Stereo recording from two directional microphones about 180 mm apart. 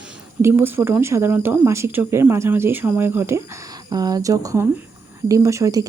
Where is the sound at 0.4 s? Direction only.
10° right (ahead or behind).